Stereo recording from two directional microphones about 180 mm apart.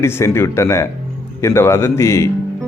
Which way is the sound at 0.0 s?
15° left (ahead or behind).